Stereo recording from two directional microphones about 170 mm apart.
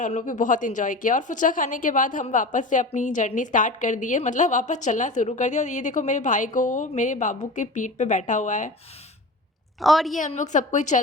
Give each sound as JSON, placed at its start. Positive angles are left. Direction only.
{"t": 0.0, "sound": "a woman's voice", "side_deg": 50}
{"t": 9.8, "sound": "a woman's voice", "side_deg": 0}
{"t": 10.2, "sound": "a woman's voice", "side_deg": 45}